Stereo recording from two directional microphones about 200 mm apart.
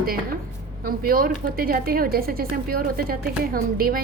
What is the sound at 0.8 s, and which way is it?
Speech, 45° right (ahead or behind).